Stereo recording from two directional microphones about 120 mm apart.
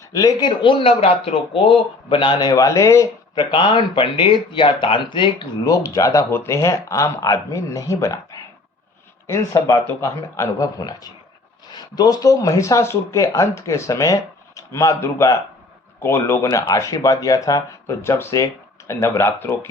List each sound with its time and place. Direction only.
0.1 s speech: 30° left (ahead or behind)
3.3 s speech: 45° left (ahead or behind)
5.6 s speech: 30° left (ahead or behind)